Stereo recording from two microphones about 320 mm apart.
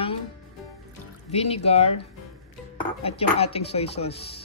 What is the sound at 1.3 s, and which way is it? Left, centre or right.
Speech, centre.